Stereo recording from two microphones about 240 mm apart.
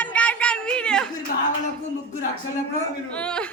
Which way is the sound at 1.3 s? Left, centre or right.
Left.